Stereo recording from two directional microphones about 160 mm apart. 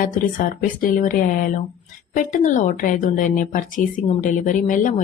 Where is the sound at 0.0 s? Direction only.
60° left (ahead or behind).